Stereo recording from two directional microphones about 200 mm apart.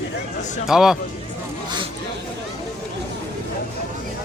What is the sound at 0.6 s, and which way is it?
Speech, 5° right (ahead or behind).